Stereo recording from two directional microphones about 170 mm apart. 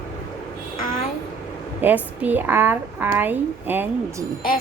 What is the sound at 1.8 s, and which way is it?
Speech, 10° right (ahead or behind).